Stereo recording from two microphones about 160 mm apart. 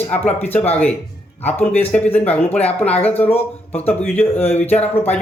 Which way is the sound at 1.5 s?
10° left (ahead or behind).